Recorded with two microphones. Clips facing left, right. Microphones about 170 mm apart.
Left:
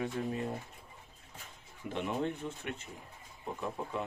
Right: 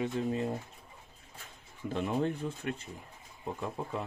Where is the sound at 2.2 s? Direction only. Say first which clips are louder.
Right 3 dB; 35° right (ahead or behind).